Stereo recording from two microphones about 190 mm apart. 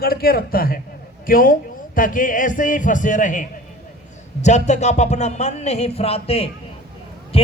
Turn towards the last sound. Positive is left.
turn(degrees=30)  # may be behind; listen again after turning